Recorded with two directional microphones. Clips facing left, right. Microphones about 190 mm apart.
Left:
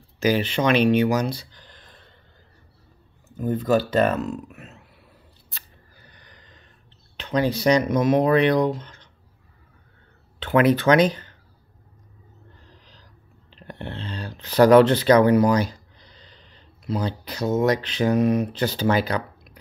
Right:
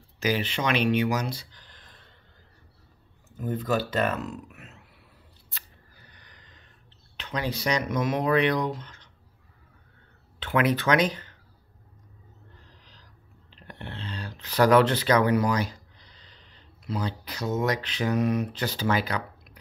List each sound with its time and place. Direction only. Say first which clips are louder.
0.2 s speech: left 6 dB; 35° left (ahead or behind)
3.3 s speech: left 6 dB; 35° left (ahead or behind)
7.2 s speech: left 8 dB; 30° left (ahead or behind)
10.4 s speech: left 6 dB; 35° left (ahead or behind)
13.7 s speech: left 5 dB; 30° left (ahead or behind)
16.8 s speech: left 5 dB; 30° left (ahead or behind)